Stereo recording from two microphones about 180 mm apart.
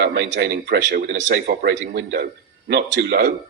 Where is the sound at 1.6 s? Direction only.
60° right (ahead or behind).